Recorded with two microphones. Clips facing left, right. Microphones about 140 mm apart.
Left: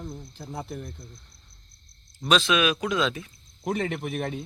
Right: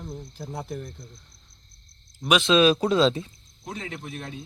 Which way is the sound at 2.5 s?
30° right (ahead or behind).